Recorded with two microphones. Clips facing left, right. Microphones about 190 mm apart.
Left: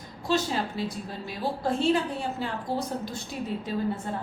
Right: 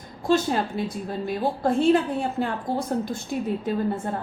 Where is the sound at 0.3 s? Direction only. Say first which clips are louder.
Right 5 dB; 50° right (ahead or behind).